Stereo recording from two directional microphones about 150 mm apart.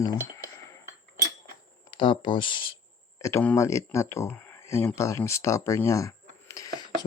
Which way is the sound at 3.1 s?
20° left (ahead or behind).